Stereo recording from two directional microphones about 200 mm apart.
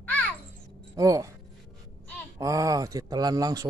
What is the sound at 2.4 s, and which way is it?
Speech, 15° right (ahead or behind).